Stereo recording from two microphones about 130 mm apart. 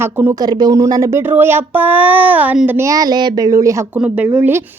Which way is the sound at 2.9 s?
30° right (ahead or behind).